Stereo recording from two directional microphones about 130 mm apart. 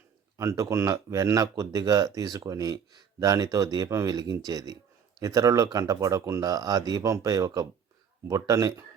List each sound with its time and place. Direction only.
0.3 s speech: 25° right (ahead or behind)